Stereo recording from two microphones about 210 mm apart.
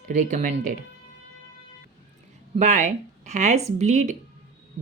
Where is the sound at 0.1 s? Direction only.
35° right (ahead or behind).